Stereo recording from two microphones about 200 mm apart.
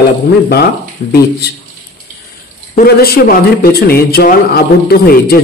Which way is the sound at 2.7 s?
50° left (ahead or behind).